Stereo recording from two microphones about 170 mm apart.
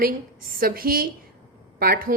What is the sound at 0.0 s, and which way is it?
Speech, 60° right (ahead or behind).